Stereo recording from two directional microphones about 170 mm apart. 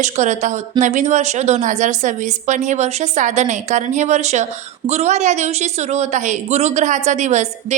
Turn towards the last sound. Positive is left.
turn(degrees=-45)  # may be behind; listen again after turning